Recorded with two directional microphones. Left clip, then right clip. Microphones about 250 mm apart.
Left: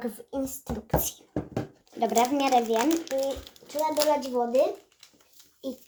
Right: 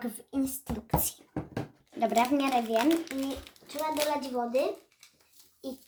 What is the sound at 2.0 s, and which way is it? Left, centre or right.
Speech, centre.